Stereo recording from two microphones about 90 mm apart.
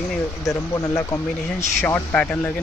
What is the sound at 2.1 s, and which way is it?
Speech, 15° left (ahead or behind).